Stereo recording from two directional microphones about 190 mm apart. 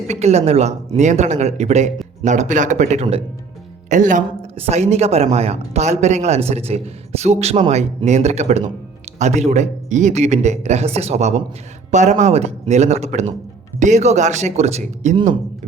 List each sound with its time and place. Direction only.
0.1 s speech: 35° right (ahead or behind)